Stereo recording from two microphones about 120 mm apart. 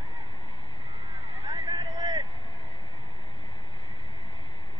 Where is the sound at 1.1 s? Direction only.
55° right (ahead or behind).